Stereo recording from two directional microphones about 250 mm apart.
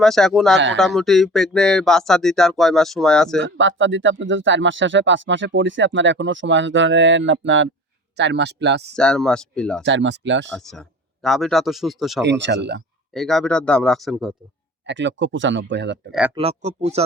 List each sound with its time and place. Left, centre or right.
0.0 s speech: centre
0.5 s speech: right
0.8 s speech: centre
3.6 s speech: right
9.0 s speech: centre
9.8 s speech: right
10.5 s speech: centre
12.2 s speech: right
13.1 s speech: centre
14.8 s speech: right
16.3 s speech: right